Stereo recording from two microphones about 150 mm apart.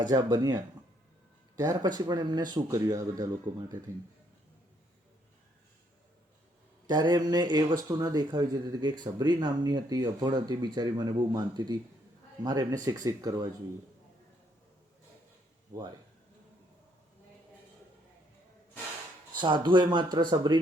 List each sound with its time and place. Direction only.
0.0 s speech: 25° right (ahead or behind)
6.8 s speech: 30° right (ahead or behind)
15.7 s speech: 25° right (ahead or behind)
19.4 s speech: 30° right (ahead or behind)